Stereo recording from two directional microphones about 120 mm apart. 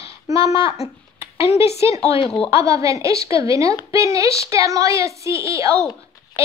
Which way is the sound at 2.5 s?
25° right (ahead or behind).